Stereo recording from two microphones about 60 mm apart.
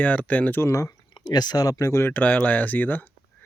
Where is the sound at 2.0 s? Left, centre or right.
Left.